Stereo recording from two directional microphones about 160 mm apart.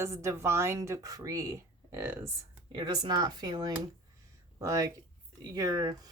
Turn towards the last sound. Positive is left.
turn(degrees=-25)  # may be behind; listen again after turning